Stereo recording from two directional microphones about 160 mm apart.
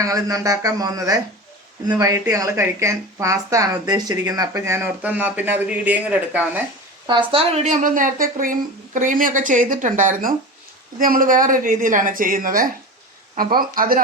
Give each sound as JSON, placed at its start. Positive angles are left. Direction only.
{"t": 0.0, "sound": "speech", "side_deg": -20}
{"t": 7.1, "sound": "speech", "side_deg": -30}